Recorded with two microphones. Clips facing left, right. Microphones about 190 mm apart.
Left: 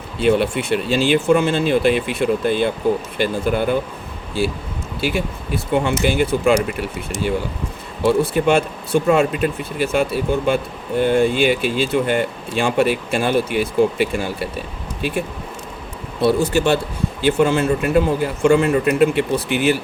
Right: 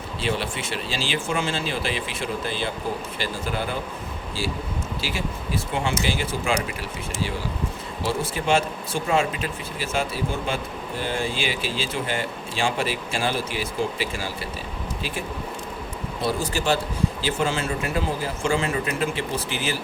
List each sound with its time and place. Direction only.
0.2 s speech: 55° left (ahead or behind)
16.2 s speech: 65° left (ahead or behind)